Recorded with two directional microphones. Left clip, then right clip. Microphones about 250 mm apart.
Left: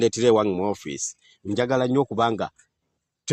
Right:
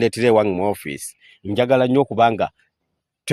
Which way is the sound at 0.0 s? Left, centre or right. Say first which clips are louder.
Right 3 dB; right.